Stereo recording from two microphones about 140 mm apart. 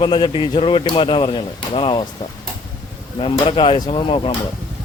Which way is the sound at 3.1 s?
40° left (ahead or behind).